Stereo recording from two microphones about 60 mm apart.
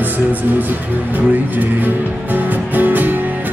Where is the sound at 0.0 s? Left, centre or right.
Right.